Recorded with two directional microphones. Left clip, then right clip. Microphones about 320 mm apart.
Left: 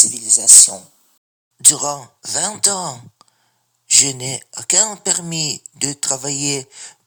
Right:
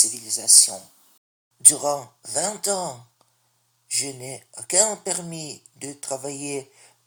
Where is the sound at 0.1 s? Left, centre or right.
Left.